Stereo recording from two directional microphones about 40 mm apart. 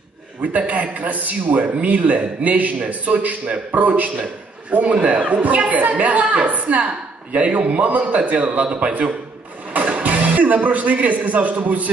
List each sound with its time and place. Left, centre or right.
0.4 s a man's voice: right